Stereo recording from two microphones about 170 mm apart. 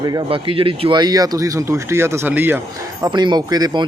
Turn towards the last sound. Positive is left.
turn(degrees=-25)  # may be behind; listen again after turning